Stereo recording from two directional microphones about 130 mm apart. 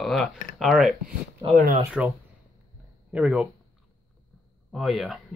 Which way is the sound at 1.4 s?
35° right (ahead or behind).